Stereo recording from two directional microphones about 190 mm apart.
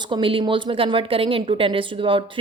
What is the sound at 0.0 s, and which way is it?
A woman's voice, 25° right (ahead or behind).